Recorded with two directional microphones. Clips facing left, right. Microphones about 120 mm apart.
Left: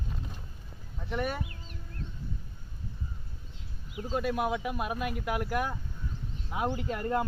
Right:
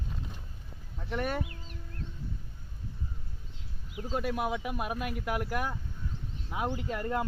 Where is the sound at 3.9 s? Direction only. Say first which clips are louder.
Left 2 dB; 10° left (ahead or behind).